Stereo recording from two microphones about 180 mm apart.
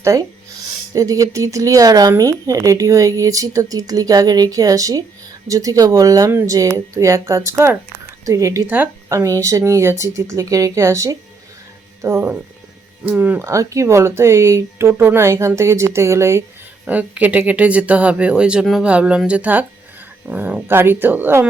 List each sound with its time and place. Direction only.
0.0 s a woman's voice: 15° right (ahead or behind)